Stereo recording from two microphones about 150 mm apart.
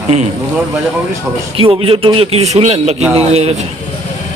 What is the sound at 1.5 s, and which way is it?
Speech, 40° right (ahead or behind).